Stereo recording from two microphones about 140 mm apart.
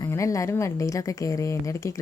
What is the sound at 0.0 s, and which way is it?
Speech, 20° left (ahead or behind).